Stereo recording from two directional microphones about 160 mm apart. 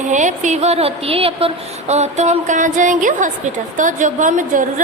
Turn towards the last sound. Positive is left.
turn(degrees=-55)  # may be behind; listen again after turning